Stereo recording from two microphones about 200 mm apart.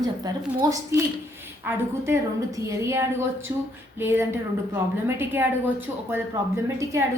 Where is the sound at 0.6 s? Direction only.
15° right (ahead or behind).